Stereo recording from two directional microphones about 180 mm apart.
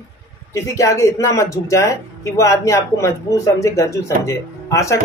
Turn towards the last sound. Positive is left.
turn(degrees=15)  # may be behind; listen again after turning